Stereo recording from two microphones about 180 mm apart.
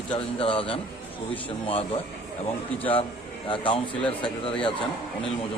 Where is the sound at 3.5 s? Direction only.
30° left (ahead or behind).